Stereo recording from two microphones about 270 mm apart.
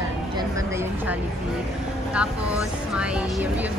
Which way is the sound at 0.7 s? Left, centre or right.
Centre.